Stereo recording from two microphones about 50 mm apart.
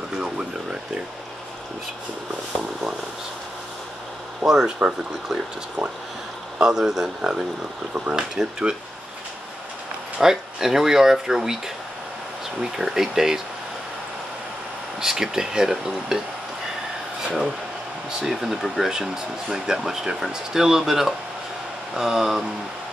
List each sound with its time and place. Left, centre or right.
0.2 s a sound: centre
4.5 s speech: centre
6.6 s speech: centre
7.9 s speech: right
8.2 s speech: centre
10.1 s speech: centre
12.7 s speech: centre
15.0 s speech: centre
17.2 s speech: centre